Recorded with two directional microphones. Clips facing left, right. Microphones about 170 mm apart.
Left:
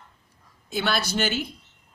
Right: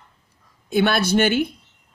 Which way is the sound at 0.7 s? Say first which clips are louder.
Right 8 dB; 55° right (ahead or behind).